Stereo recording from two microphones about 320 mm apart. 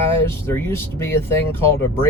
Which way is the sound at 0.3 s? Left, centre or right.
Centre.